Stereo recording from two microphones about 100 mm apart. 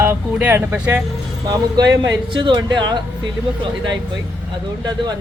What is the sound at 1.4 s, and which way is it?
Speech, 40° right (ahead or behind).